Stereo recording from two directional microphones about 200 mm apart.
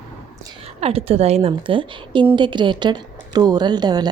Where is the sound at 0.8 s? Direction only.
30° right (ahead or behind).